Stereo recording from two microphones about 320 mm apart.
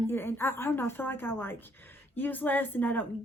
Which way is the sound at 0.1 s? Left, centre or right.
Centre.